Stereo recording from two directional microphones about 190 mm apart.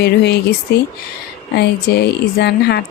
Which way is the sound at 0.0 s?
60° left (ahead or behind).